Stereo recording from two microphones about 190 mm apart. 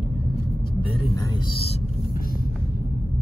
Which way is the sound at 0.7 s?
25° left (ahead or behind).